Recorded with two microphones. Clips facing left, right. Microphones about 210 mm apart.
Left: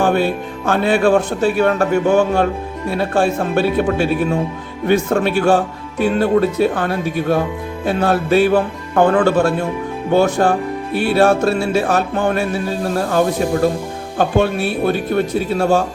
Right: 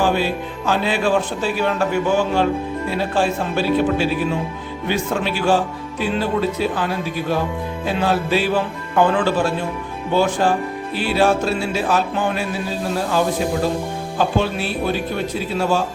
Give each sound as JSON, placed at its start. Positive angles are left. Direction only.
{"t": 0.0, "sound": "speech", "side_deg": 55}